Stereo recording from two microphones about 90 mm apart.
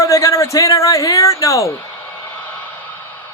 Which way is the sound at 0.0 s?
35° left (ahead or behind).